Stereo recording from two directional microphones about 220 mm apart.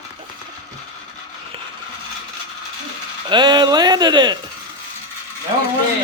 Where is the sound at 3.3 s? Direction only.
20° right (ahead or behind).